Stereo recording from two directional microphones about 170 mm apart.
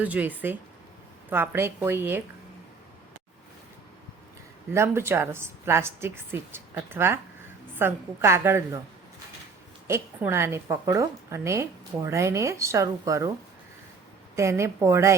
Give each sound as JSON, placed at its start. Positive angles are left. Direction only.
{"t": 0.0, "sound": "a woman's voice", "side_deg": -10}
{"t": 4.7, "sound": "a woman's voice", "side_deg": -15}
{"t": 9.8, "sound": "a woman's voice", "side_deg": -15}
{"t": 14.3, "sound": "a woman's voice", "side_deg": -15}